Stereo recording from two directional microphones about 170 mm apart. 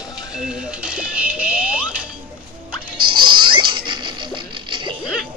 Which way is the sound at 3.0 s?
30° right (ahead or behind).